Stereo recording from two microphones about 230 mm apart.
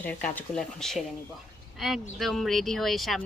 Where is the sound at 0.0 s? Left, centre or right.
Centre.